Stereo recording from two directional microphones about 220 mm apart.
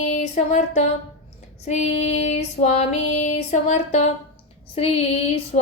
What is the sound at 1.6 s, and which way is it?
Female singing, 30° left (ahead or behind).